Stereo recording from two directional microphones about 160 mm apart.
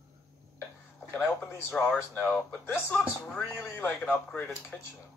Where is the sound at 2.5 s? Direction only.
15° left (ahead or behind).